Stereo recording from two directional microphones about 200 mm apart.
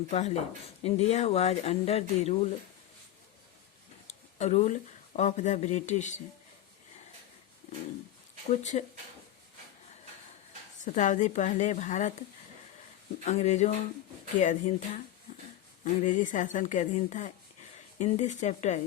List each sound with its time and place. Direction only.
0.1 s speech: 35° left (ahead or behind)
4.0 s a sound: 35° left (ahead or behind)
5.1 s speech: 35° left (ahead or behind)
8.7 s speech: 35° left (ahead or behind)
10.8 s speech: 40° left (ahead or behind)
13.2 s speech: 35° left (ahead or behind)